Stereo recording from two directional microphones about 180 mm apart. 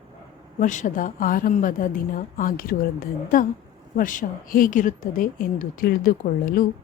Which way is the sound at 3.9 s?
50° left (ahead or behind).